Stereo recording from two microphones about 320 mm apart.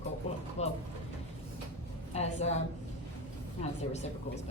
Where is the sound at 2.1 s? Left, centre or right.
Centre.